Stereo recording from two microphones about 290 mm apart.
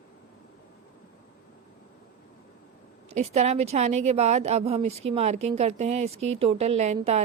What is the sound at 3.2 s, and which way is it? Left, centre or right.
Speech, right.